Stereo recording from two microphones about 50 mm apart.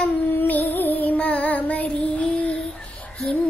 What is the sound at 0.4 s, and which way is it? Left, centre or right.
Music, left.